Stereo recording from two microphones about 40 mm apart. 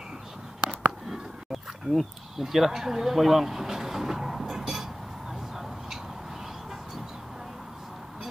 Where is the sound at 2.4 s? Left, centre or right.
Centre.